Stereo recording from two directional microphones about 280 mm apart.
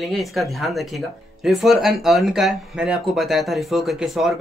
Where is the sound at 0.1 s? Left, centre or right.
Centre.